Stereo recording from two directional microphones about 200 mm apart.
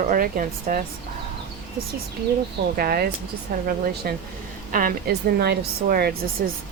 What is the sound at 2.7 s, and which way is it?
Speech, 50° right (ahead or behind).